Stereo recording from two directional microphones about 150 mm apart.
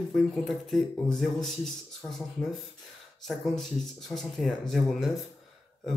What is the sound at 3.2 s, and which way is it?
Speech, centre (ahead or behind).